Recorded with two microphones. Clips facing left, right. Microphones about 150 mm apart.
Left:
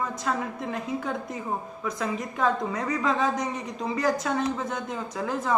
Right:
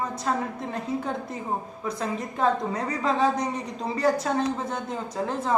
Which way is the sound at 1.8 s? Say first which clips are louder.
Left 1 dB; 30° right (ahead or behind).